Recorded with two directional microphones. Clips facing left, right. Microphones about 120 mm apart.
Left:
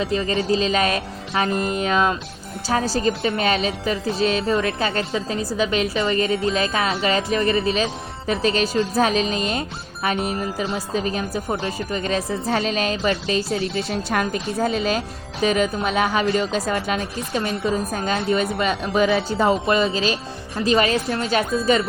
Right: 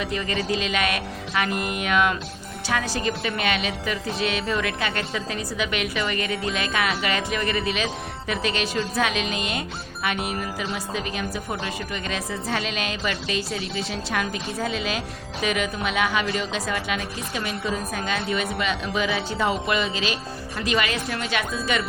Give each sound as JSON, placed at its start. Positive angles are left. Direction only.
{"t": 0.0, "sound": "a woman's voice", "side_deg": 30}